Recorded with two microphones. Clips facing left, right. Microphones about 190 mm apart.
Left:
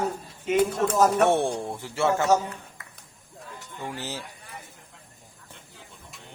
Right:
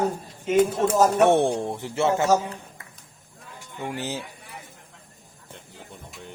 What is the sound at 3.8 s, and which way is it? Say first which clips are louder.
Speech: right 4 dB; 20° right (ahead or behind).